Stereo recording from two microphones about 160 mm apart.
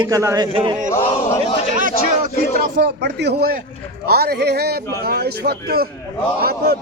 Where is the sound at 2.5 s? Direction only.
90° right.